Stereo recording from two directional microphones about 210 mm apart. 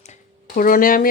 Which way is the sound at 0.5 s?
40° left (ahead or behind).